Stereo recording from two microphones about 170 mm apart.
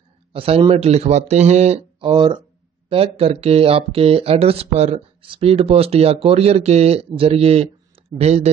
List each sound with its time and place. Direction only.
0.3 s speech: 35° right (ahead or behind)